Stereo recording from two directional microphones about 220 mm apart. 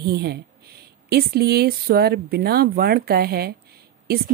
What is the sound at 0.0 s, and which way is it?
A woman's voice, 45° right (ahead or behind).